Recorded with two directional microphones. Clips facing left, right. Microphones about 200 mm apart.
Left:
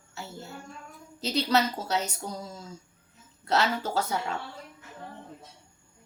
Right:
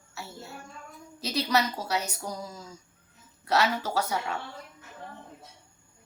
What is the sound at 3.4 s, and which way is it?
Speech, 25° left (ahead or behind).